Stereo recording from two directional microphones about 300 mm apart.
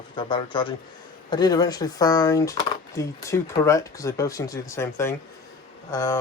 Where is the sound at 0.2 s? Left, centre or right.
Centre.